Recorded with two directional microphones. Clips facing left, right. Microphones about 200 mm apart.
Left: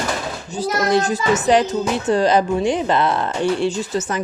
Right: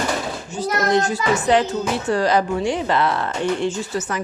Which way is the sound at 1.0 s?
15° left (ahead or behind).